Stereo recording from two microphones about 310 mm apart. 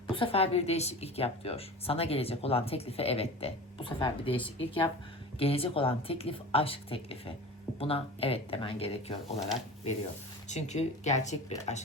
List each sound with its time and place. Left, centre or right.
0.1 s a woman's voice: centre
10.5 s a woman's voice: left